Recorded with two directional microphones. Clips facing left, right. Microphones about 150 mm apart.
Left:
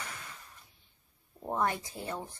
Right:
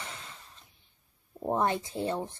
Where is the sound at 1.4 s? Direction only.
25° right (ahead or behind).